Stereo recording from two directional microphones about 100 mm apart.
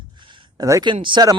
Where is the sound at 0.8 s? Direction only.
55° right (ahead or behind).